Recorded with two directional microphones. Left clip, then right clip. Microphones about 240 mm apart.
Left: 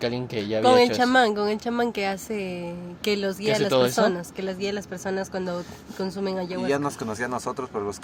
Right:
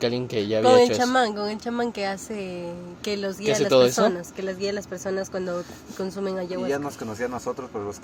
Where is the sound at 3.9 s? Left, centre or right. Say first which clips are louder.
Even; centre.